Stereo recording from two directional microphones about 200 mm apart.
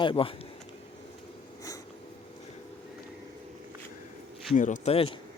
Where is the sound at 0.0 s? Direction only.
25° left (ahead or behind).